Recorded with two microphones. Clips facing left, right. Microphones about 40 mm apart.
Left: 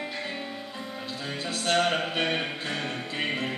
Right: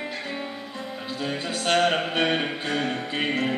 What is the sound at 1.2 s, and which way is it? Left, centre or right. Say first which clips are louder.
Music: right 4 dB; right.